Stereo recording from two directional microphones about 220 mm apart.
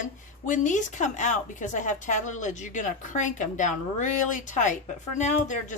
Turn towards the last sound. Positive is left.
turn(degrees=35)  # may be behind; listen again after turning